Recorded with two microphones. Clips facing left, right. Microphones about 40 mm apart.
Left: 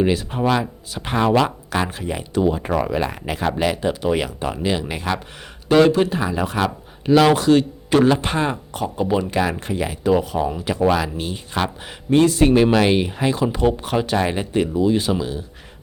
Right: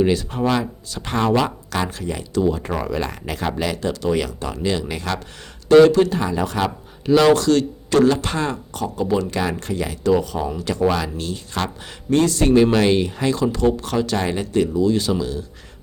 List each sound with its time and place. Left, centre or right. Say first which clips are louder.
0.0 s speech: even; centre